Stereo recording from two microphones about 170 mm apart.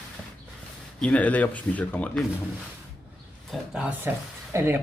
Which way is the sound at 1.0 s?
10° left (ahead or behind).